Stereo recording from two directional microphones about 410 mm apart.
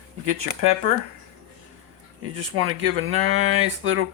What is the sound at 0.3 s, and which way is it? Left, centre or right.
Speech, right.